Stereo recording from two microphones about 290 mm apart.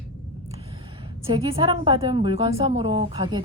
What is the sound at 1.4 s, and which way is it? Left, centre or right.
A woman's voice, centre.